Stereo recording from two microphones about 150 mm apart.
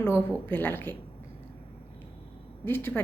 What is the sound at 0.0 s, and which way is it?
Speech, 15° left (ahead or behind).